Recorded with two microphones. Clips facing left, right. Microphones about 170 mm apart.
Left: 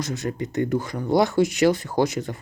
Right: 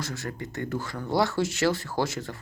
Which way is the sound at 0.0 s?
20° left (ahead or behind).